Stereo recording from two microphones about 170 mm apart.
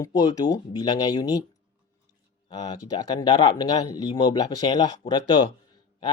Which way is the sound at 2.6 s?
25° left (ahead or behind).